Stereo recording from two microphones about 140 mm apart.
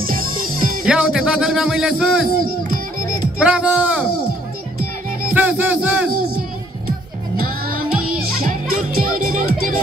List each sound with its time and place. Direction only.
0.0 s music: 90° right
0.8 s speech: 5° right (ahead or behind)
3.3 s music: 5° right (ahead or behind)
5.3 s music: 10° right (ahead or behind)
8.9 s a child's voice: 80° right